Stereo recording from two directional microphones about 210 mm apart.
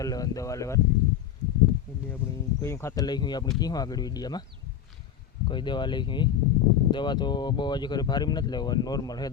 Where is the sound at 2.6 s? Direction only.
15° left (ahead or behind).